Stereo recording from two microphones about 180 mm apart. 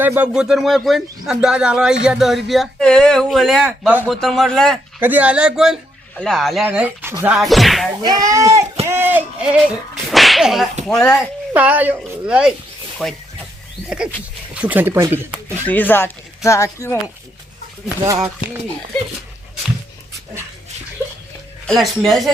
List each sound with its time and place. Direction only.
0.0 s a man's voice: 10° right (ahead or behind)
4.9 s a man's voice: 10° right (ahead or behind)
7.3 s a man's voice: centre (ahead or behind)
8.0 s speech: 20° right (ahead or behind)
8.9 s whip: 10° right (ahead or behind)
11.0 s speech: 15° left (ahead or behind)
11.5 s a man's voice: 10° right (ahead or behind)
14.5 s speech: 10° right (ahead or behind)
15.6 s speech: 10° left (ahead or behind)
21.7 s a man's voice: centre (ahead or behind)